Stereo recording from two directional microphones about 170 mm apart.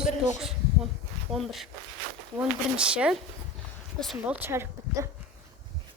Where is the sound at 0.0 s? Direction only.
Centre (ahead or behind).